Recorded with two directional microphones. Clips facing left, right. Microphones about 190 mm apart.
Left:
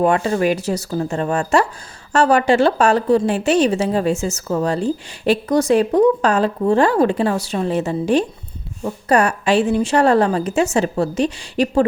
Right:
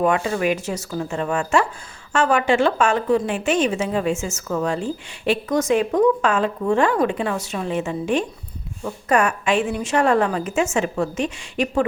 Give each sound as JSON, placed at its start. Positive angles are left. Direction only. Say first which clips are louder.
{"t": 0.0, "sound": "speech", "louder": "left 3 dB", "side_deg": 35}